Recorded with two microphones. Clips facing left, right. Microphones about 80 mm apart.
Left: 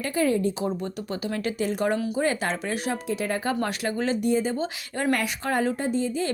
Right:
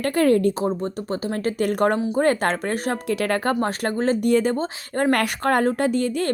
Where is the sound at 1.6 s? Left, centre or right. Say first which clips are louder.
Right 5 dB; right.